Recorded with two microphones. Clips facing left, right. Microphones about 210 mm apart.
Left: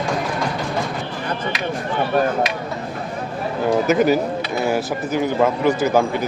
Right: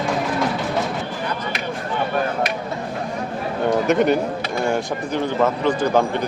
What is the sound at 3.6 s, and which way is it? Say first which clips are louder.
Speech: left 1 dB; 5° left (ahead or behind).